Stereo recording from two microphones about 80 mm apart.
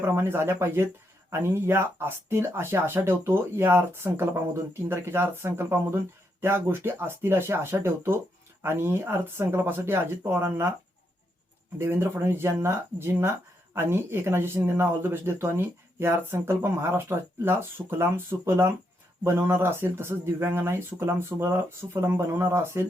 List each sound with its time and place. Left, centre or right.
0.0 s speech: right
11.8 s speech: right